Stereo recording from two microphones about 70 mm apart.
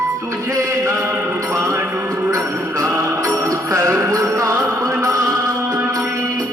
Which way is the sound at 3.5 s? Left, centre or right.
Right.